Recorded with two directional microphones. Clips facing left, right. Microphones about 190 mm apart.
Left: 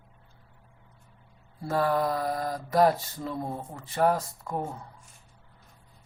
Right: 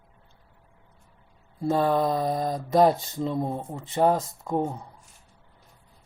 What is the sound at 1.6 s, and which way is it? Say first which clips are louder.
Mantra: right 3 dB; 20° right (ahead or behind).